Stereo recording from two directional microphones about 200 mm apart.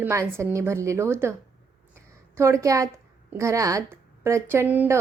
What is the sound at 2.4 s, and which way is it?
A woman's voice, 15° right (ahead or behind).